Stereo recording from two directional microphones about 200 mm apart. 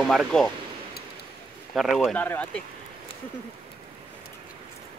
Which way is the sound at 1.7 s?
Centre (ahead or behind).